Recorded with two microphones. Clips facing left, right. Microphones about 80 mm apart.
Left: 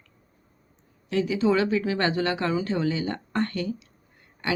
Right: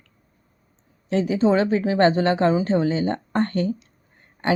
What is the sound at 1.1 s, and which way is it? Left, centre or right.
Speech, right.